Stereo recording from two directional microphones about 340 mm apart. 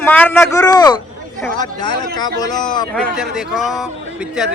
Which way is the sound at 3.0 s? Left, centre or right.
Centre.